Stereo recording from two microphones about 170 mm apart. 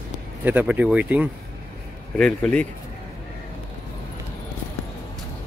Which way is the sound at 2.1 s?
5° left (ahead or behind).